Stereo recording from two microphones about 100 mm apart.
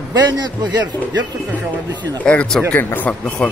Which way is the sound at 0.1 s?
45° right (ahead or behind).